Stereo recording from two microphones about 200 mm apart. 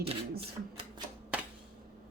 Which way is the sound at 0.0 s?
30° right (ahead or behind).